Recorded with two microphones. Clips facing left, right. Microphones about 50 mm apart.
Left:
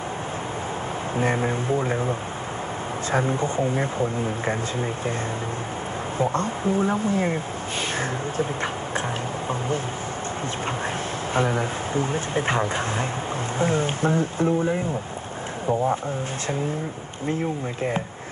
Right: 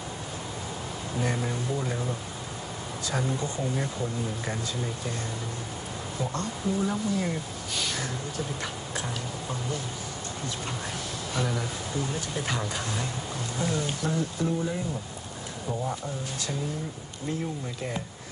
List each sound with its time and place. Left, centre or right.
1.1 s speech: left
6.1 s speech: left
11.3 s speech: left